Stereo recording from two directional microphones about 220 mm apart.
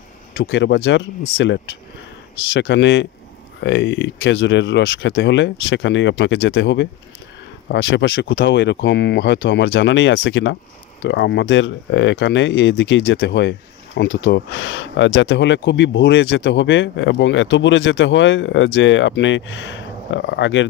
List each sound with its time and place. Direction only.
0.4 s speech: 55° left (ahead or behind)